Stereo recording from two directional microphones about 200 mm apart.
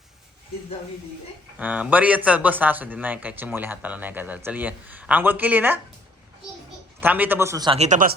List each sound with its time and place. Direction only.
1.5 s speech: 5° right (ahead or behind)
7.0 s speech: 10° right (ahead or behind)
7.8 s speech: 40° right (ahead or behind)